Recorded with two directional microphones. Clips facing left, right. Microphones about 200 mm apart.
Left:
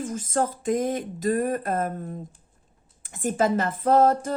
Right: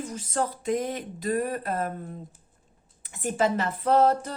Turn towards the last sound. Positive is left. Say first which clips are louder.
# left 2 dB
turn(degrees=45)  # may be behind; listen again after turning